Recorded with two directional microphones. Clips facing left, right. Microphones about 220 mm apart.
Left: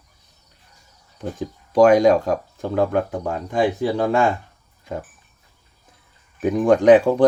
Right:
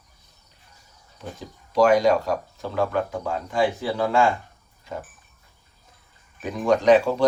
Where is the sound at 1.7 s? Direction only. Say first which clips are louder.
Left 4 dB; 50° left (ahead or behind).